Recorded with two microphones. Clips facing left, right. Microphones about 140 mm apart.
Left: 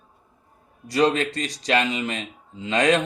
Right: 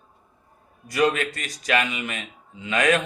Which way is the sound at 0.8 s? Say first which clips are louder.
Left 2 dB; 30° left (ahead or behind).